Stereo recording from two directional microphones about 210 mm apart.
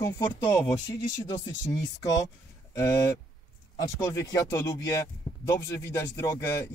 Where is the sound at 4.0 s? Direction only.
15° left (ahead or behind).